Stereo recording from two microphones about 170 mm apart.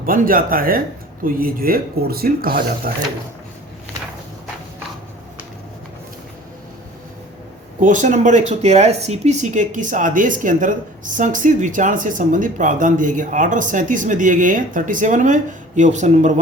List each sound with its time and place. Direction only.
0.0 s speech: 55° right (ahead or behind)
7.8 s speech: 50° right (ahead or behind)